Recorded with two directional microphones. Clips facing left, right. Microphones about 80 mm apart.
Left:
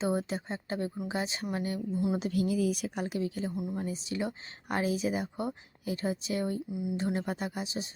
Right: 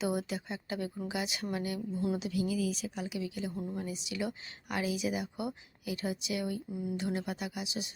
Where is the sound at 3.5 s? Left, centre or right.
Centre.